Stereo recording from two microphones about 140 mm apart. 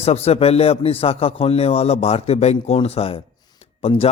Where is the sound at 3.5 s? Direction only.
45° left (ahead or behind).